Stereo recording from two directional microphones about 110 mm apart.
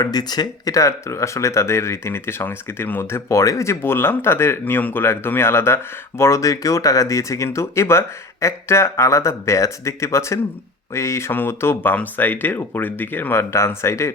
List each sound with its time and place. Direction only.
0.0 s speech: 40° left (ahead or behind)